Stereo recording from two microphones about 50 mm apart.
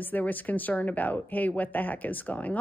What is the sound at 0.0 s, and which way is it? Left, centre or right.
Speech, left.